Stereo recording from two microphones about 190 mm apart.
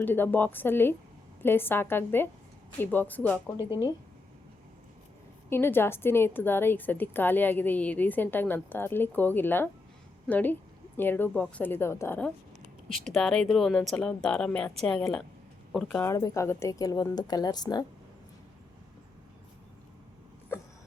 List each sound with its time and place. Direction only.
0.0 s a woman's voice: 10° left (ahead or behind)
5.5 s a woman's voice: 10° left (ahead or behind)
16.0 s a woman's voice: 15° left (ahead or behind)